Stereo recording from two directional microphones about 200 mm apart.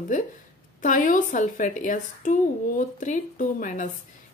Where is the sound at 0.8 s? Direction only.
40° left (ahead or behind).